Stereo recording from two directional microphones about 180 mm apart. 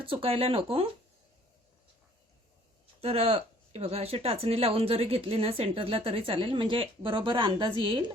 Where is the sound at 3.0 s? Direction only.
35° right (ahead or behind).